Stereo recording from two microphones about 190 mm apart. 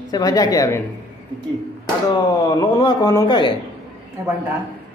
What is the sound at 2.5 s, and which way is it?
Speech, 25° left (ahead or behind).